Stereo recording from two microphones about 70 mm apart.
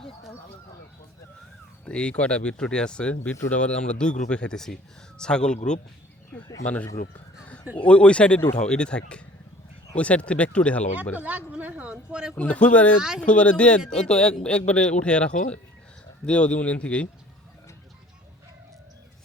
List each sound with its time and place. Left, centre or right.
1.8 s speech: centre
7.8 s speech: centre
11.2 s speech: right
12.4 s speech: centre